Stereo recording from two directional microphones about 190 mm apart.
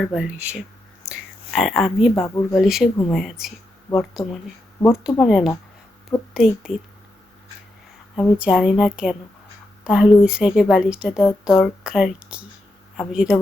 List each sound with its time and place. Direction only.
0.1 s a woman's voice: 5° right (ahead or behind)
2.2 s speech: 15° left (ahead or behind)
2.6 s a woman's voice: centre (ahead or behind)
8.1 s a woman's voice: centre (ahead or behind)